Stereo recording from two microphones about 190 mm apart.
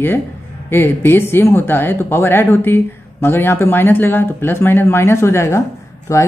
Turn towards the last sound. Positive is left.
turn(degrees=15)  # may be behind; listen again after turning